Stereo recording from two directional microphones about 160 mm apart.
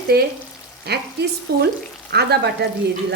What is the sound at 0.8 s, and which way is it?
Frying, 90° right.